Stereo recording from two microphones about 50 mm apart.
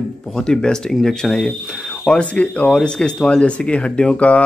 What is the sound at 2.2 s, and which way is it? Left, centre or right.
Speech, left.